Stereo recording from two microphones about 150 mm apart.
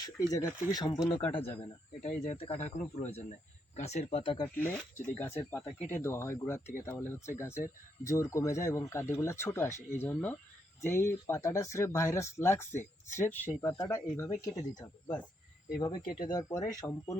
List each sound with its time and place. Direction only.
0.0 s speech: 25° left (ahead or behind)
2.0 s speech: 65° left (ahead or behind)
2.2 s speech: 45° left (ahead or behind)
4.5 s speech: 15° left (ahead or behind)